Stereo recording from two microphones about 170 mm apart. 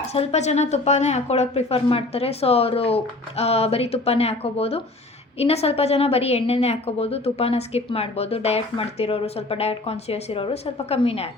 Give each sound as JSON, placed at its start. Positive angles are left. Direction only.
{"t": 0.1, "sound": "a woman's voice", "side_deg": 40}